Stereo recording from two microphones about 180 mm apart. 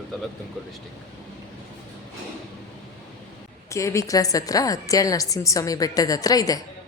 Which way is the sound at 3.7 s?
15° left (ahead or behind).